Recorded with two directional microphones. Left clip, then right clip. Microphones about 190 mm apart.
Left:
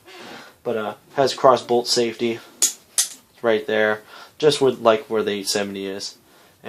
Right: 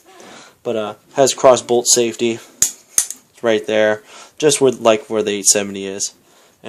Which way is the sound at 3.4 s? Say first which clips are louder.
Right 4 dB; 50° right (ahead or behind).